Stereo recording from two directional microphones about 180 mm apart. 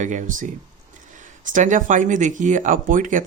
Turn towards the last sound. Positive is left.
turn(degrees=-45)  # may be behind; listen again after turning